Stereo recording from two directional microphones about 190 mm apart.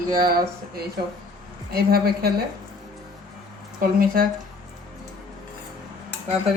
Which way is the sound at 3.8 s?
50° right (ahead or behind).